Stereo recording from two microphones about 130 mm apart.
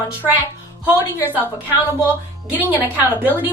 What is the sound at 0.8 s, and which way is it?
A woman's voice, 15° right (ahead or behind).